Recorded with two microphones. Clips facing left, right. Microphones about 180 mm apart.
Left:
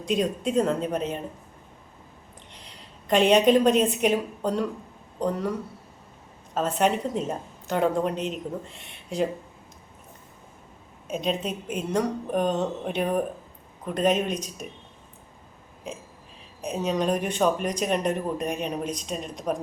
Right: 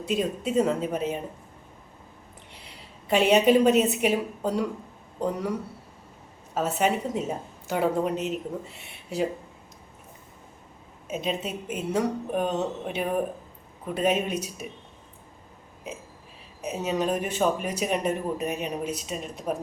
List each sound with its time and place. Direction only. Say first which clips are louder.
0.0 s speech: left 2 dB; 5° right (ahead or behind)
2.5 s a woman's voice: right 1 dB; 10° right (ahead or behind)
11.1 s speech: left 2 dB; 5° right (ahead or behind)
16.6 s speech: left 1 dB; 5° right (ahead or behind)